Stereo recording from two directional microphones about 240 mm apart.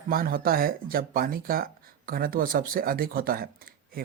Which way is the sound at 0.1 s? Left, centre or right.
Right.